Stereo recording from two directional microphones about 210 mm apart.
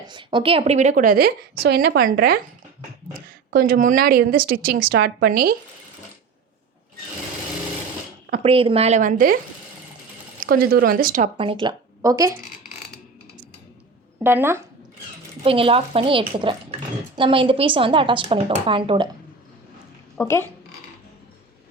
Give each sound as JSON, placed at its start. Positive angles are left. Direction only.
{"t": 0.1, "sound": "a woman's voice", "side_deg": -20}
{"t": 3.5, "sound": "a woman's voice", "side_deg": -45}
{"t": 8.3, "sound": "a woman's voice", "side_deg": -30}
{"t": 10.4, "sound": "a woman's voice", "side_deg": -45}
{"t": 11.3, "sound": "a woman's voice", "side_deg": -25}
{"t": 14.2, "sound": "speech", "side_deg": -10}
{"t": 15.4, "sound": "a woman's voice", "side_deg": -25}
{"t": 20.1, "sound": "speech", "side_deg": 10}